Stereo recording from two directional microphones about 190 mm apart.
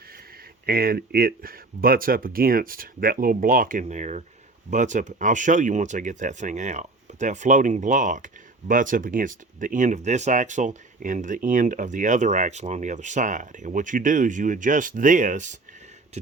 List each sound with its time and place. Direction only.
0.6 s speech: 50° right (ahead or behind)